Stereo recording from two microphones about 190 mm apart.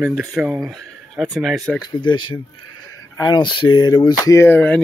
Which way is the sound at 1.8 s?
25° left (ahead or behind).